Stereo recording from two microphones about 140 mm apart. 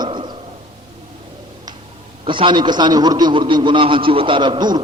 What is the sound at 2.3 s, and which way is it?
A man's voice, 35° right (ahead or behind).